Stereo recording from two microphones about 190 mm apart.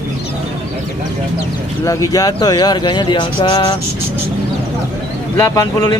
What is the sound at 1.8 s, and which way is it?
Speech, 15° left (ahead or behind).